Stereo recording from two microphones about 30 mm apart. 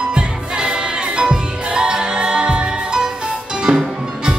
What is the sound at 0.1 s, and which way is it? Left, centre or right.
Music, right.